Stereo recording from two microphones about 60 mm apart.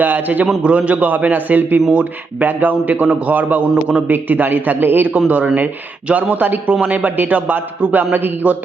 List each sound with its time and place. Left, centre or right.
0.0 s a man's voice: right
1.9 s a man's voice: centre
6.1 s a man's voice: right